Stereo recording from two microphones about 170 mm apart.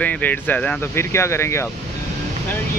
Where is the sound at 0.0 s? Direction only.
10° left (ahead or behind).